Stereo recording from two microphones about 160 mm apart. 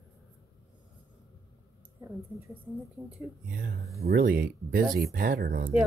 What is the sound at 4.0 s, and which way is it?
Speech, 80° right.